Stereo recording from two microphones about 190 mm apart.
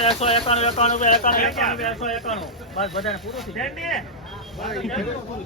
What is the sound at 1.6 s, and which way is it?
A man's voice, centre (ahead or behind).